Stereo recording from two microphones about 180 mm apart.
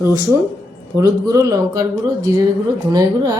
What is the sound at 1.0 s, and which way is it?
A woman's voice, 15° right (ahead or behind).